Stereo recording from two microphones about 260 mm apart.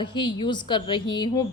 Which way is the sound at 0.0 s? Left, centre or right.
Centre.